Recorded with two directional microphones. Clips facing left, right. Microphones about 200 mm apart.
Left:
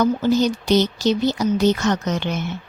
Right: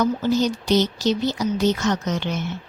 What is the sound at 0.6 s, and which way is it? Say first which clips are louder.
A woman's voice: left 2 dB; 60° left (ahead or behind).